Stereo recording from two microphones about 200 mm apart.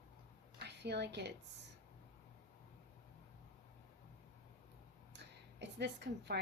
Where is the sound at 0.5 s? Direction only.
55° right (ahead or behind).